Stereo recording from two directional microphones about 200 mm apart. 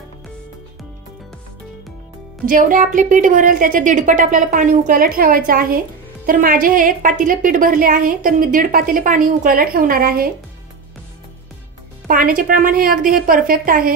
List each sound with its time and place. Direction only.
2.4 s a woman's voice: 45° right (ahead or behind)
12.1 s a woman's voice: 45° right (ahead or behind)